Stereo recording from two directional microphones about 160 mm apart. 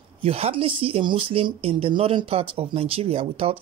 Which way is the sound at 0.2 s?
40° right (ahead or behind).